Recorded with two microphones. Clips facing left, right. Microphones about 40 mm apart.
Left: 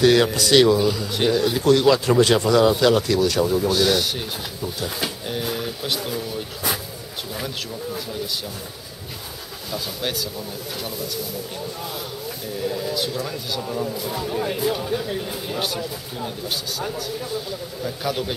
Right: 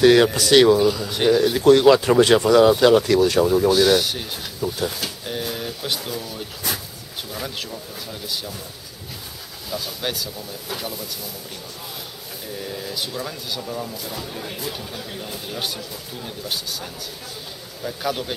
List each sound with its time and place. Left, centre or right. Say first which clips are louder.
0.0 s speech: right 2 dB; centre
0.4 s speech: right 2 dB; right
0.7 s speech: right 2 dB; centre
1.6 s speech: right 4 dB; right; by 3.1 s centre
3.1 s speech: right 3 dB; right
3.3 s speech: right 3 dB; centre
9.7 s speech: even; centre
12.6 s speech: left 6 dB; centre
13.7 s speech: left 4 dB; centre
17.8 s speech: even; centre